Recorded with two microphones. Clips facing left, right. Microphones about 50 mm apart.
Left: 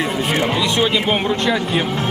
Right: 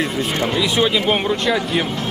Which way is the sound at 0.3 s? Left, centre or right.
Centre.